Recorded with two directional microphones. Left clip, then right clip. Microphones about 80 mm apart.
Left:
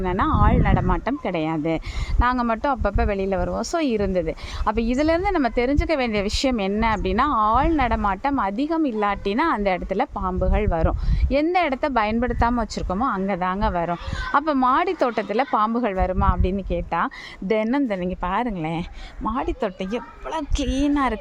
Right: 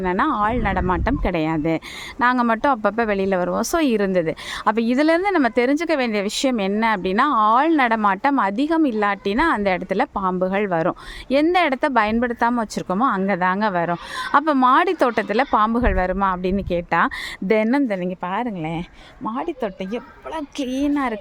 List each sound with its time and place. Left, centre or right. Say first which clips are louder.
0.0 s speech: right 2 dB; right
6.0 s speech: right 1 dB; right
9.0 s speech: right 2 dB; right
10.2 s speech: right 4 dB; right
12.7 s speech: right 4 dB; right
18.2 s a woman's voice: even; centre